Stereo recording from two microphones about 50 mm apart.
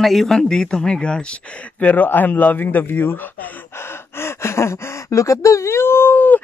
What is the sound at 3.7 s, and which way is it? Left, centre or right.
Gasp, left.